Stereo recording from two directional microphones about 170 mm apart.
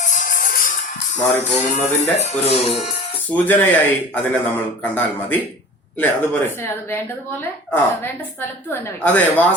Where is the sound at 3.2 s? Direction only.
10° left (ahead or behind).